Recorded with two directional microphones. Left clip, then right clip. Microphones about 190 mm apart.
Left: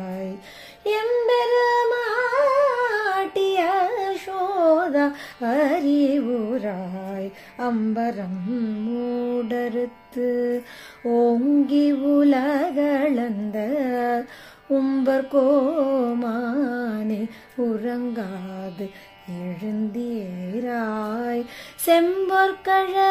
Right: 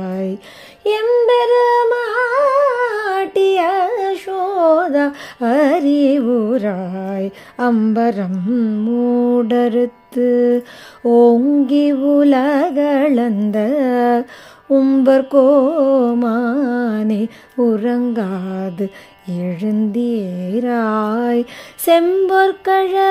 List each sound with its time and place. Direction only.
0.0 s music: 55° right (ahead or behind)
9.3 s mantra: 50° right (ahead or behind)
11.1 s music: 50° right (ahead or behind)